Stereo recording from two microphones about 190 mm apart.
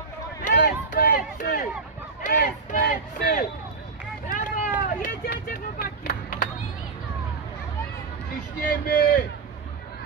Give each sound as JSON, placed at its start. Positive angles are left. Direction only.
{"t": 0.4, "sound": "crowd", "side_deg": 45}
{"t": 4.3, "sound": "vehicle", "side_deg": 45}
{"t": 8.6, "sound": "a sound", "side_deg": 50}